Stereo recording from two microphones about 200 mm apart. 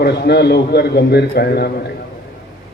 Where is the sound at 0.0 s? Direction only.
55° left (ahead or behind).